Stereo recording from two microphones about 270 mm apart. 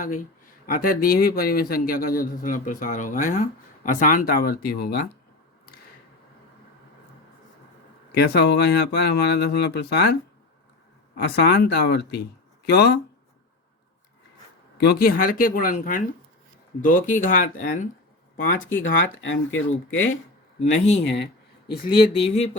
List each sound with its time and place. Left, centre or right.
0.7 s a man's voice: left
8.1 s a man's voice: left
11.2 s a man's voice: left
14.8 s a man's voice: left
18.7 s speech: left
20.7 s speech: left